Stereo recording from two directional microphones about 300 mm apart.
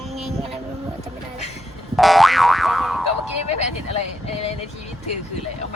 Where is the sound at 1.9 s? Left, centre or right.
Centre.